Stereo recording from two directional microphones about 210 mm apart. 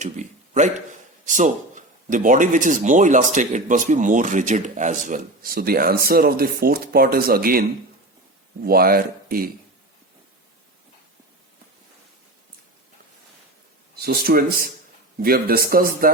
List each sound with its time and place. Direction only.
0.0 s a sound: 35° right (ahead or behind)
1.2 s speech: 35° right (ahead or behind)
8.6 s speech: 45° right (ahead or behind)
13.9 s speech: 45° right (ahead or behind)